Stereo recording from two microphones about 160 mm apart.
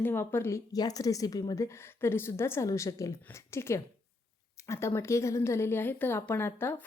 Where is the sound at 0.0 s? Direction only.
15° left (ahead or behind).